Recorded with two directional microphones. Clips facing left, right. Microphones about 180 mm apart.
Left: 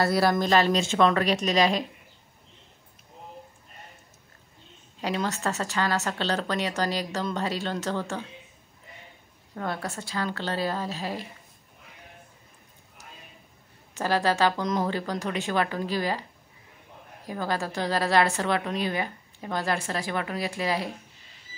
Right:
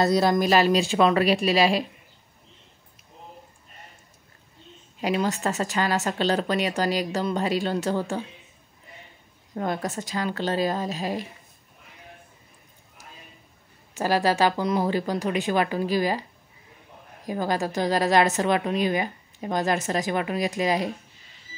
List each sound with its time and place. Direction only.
0.0 s speech: 20° right (ahead or behind)
5.0 s speech: 15° right (ahead or behind)
9.6 s speech: 15° right (ahead or behind)
13.9 s speech: 15° right (ahead or behind)
17.3 s speech: 15° right (ahead or behind)